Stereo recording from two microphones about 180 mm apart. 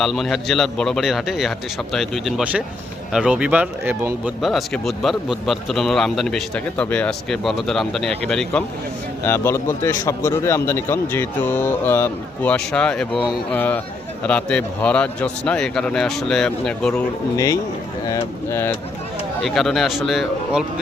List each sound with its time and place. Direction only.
0.0 s a man's voice: centre (ahead or behind)
17.3 s a man's voice: 15° left (ahead or behind)
19.4 s a man's voice: centre (ahead or behind)